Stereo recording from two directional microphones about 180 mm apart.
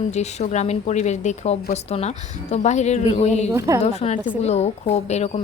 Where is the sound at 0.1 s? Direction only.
40° left (ahead or behind).